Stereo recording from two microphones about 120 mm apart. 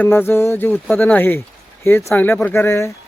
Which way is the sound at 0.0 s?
15° left (ahead or behind).